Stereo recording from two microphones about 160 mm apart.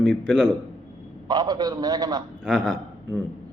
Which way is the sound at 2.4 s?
Centre (ahead or behind).